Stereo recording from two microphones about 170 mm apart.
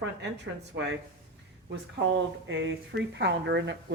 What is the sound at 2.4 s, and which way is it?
A man's voice, 90° right.